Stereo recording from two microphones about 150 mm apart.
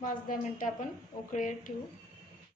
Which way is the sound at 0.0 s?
65° left (ahead or behind).